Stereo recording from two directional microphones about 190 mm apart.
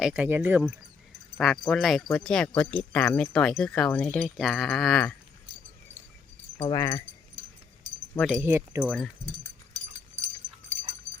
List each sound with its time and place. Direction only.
0.0 s speech: 5° right (ahead or behind)
1.4 s speech: centre (ahead or behind)
6.6 s speech: 20° left (ahead or behind)
8.1 s speech: 5° left (ahead or behind)
8.4 s speech: 15° right (ahead or behind)
9.4 s a sound: 40° right (ahead or behind)